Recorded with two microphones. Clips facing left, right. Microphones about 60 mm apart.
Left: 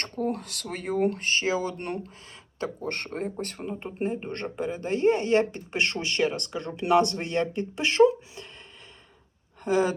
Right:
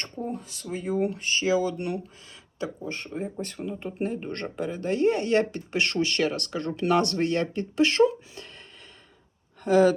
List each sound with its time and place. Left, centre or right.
0.2 s speech: left
2.8 s speech: left
3.3 s speech: left
3.7 s speech: left
9.6 s speech: left